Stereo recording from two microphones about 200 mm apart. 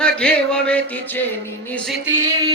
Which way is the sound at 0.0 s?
5° left (ahead or behind).